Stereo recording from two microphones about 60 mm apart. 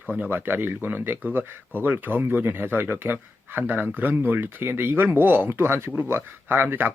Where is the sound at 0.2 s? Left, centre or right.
Right.